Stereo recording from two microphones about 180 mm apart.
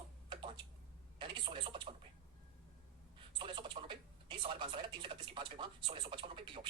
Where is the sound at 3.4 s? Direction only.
25° right (ahead or behind).